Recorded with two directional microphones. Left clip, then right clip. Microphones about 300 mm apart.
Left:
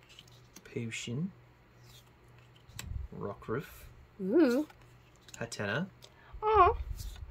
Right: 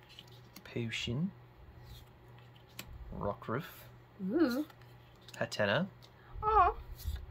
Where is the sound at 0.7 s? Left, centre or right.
Centre.